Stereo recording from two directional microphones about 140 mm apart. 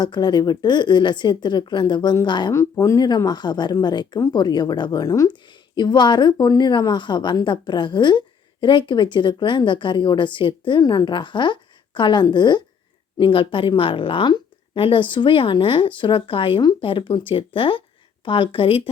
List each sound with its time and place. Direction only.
0.0 s a woman's voice: 30° left (ahead or behind)